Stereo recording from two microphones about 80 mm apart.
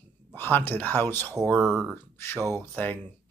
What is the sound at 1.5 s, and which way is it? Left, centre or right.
Speech, right.